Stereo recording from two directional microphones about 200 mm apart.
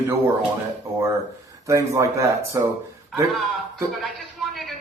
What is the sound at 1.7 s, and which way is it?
Speech, 15° right (ahead or behind).